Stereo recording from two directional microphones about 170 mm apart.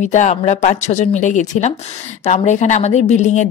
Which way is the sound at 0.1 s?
45° left (ahead or behind).